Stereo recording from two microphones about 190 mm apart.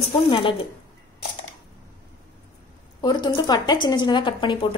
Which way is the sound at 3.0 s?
20° left (ahead or behind).